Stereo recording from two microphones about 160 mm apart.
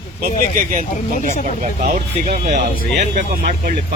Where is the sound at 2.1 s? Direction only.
40° right (ahead or behind).